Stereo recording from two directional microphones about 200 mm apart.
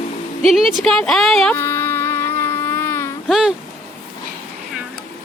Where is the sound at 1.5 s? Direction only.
10° left (ahead or behind).